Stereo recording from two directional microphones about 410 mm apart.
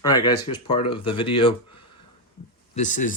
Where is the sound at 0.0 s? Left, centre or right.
Centre.